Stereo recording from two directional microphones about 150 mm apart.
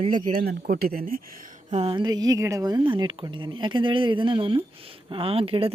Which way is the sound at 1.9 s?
30° right (ahead or behind).